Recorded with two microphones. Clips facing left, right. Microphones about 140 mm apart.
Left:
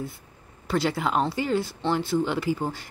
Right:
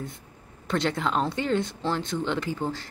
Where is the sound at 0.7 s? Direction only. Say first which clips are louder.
Left 1 dB; 5° left (ahead or behind).